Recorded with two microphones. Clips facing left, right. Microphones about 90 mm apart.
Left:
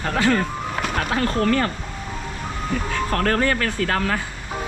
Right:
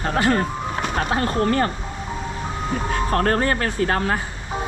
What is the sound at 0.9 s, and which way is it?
Speech, 30° right (ahead or behind).